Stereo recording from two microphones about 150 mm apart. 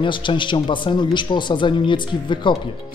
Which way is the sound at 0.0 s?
35° left (ahead or behind).